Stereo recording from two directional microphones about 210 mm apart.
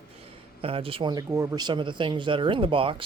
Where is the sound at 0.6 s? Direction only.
25° right (ahead or behind).